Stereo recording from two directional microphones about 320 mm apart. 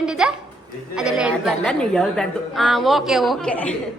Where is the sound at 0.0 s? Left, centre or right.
Centre.